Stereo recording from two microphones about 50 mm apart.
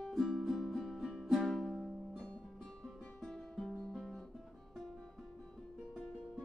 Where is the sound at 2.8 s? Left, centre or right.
Centre.